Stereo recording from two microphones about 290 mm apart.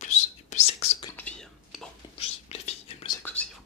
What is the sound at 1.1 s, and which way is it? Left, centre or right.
Whispering, centre.